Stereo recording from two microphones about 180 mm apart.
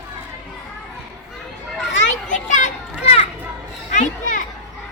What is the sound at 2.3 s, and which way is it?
Children playing, 45° left (ahead or behind).